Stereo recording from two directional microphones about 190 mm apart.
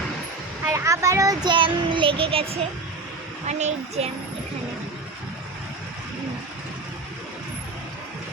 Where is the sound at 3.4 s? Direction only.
35° right (ahead or behind).